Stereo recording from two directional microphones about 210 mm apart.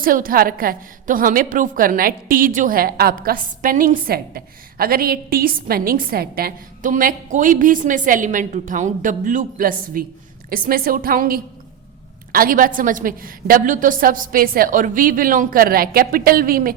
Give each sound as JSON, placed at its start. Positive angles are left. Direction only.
{"t": 0.0, "sound": "a woman's voice", "side_deg": -40}